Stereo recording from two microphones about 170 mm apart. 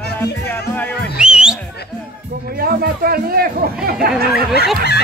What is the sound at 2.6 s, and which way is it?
Speech, 65° right (ahead or behind).